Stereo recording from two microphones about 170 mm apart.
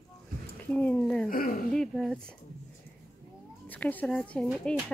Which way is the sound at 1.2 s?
55° left (ahead or behind).